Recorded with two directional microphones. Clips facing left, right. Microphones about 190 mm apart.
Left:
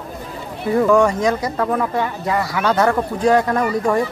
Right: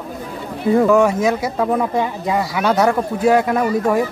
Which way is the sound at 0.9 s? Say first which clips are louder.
Right 1 dB; 5° right (ahead or behind).